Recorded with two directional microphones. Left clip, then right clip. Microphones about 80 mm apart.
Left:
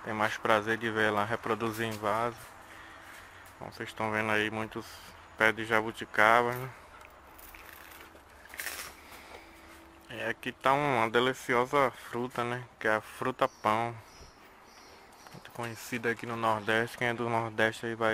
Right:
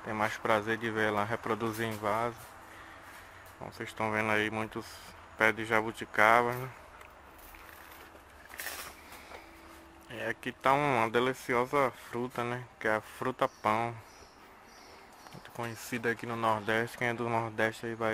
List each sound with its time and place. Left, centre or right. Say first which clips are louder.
0.0 s speech: left 2 dB; left
3.6 s speech: even; centre
10.0 s speech: left 1 dB; centre
15.5 s speech: even; centre